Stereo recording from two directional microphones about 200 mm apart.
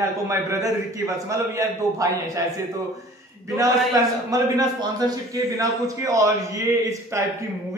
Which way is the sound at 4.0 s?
15° right (ahead or behind).